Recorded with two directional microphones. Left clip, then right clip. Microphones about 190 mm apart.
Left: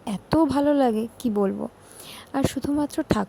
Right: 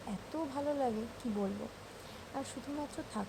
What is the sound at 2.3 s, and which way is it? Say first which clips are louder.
Speech: left 17 dB; 50° left (ahead or behind).